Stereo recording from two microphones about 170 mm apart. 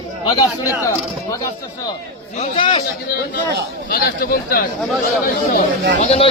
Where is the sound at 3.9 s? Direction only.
60° left (ahead or behind).